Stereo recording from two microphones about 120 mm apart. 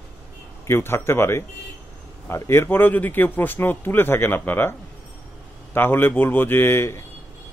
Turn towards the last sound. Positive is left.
turn(degrees=20)  # may be behind; listen again after turning